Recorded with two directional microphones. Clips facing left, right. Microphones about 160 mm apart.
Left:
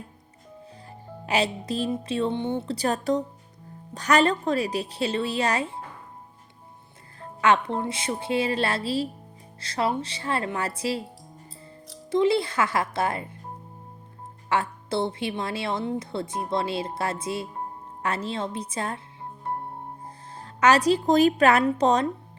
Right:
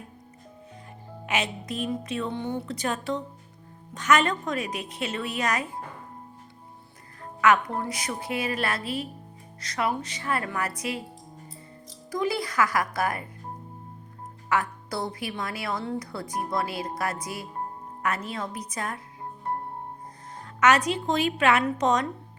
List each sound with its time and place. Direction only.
1.3 s a woman's voice: 30° left (ahead or behind)
7.2 s a woman's voice: 30° left (ahead or behind)
12.1 s a woman's voice: 25° left (ahead or behind)
14.5 s a woman's voice: 25° left (ahead or behind)
20.1 s speech: 30° left (ahead or behind)